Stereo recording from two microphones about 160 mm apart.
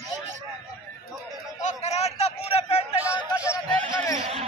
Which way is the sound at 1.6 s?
45° left (ahead or behind).